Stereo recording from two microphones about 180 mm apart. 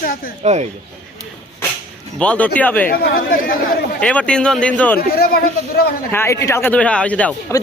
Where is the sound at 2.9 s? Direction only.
55° left (ahead or behind).